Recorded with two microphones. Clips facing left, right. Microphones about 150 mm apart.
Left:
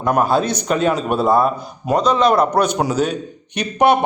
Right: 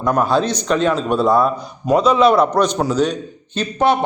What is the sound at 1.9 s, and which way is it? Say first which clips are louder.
A man's voice: right 2 dB; 5° right (ahead or behind).